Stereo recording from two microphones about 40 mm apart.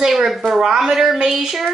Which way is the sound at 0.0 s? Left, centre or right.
Centre.